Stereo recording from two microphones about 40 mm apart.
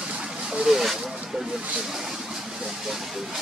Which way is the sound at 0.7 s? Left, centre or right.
Centre.